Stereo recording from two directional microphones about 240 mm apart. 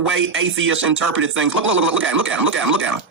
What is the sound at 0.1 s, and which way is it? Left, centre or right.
Speech, right.